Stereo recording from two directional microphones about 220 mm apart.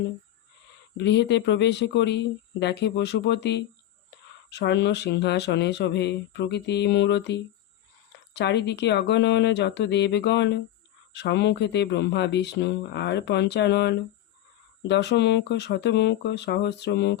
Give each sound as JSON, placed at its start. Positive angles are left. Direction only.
{"t": 0.9, "sound": "speech", "side_deg": 50}